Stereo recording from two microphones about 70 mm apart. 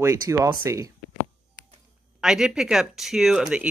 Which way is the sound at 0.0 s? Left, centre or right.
Right.